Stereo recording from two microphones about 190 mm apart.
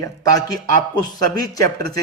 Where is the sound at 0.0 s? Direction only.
20° left (ahead or behind).